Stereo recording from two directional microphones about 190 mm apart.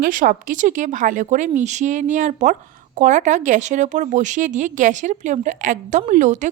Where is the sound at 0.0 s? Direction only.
45° right (ahead or behind).